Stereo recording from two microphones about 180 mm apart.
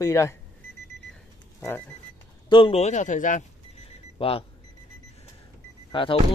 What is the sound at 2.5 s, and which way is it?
Speech, 30° left (ahead or behind).